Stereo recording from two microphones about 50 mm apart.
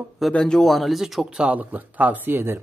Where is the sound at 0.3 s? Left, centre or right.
Centre.